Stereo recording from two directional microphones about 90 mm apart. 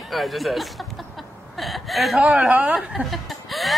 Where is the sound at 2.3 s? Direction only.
10° right (ahead or behind).